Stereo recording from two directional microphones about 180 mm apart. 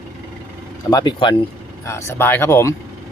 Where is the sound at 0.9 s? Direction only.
20° left (ahead or behind).